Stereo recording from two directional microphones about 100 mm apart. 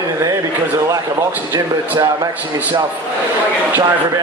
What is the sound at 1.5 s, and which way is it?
Speech, 35° right (ahead or behind).